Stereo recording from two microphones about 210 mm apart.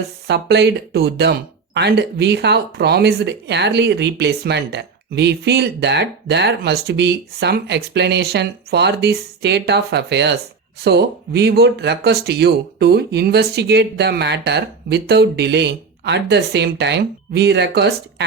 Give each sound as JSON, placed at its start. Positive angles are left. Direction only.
{"t": 0.3, "sound": "speech", "side_deg": -55}